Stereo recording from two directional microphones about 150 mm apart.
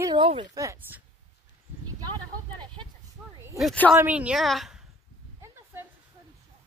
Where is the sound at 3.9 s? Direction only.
10° right (ahead or behind).